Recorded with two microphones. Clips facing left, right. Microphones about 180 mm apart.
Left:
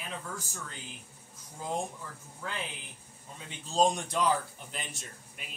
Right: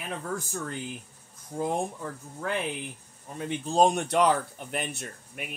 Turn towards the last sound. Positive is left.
turn(degrees=-60)  # may be behind; listen again after turning